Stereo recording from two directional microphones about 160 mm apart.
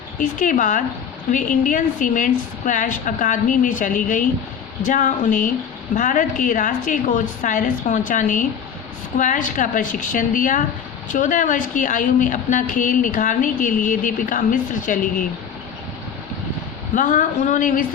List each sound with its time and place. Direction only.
0.2 s a woman's voice: 55° left (ahead or behind)
16.9 s a woman's voice: 55° left (ahead or behind)